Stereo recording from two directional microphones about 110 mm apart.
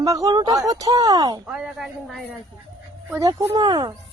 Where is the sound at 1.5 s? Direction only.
5° right (ahead or behind).